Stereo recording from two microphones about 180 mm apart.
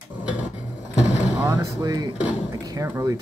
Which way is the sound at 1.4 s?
20° right (ahead or behind).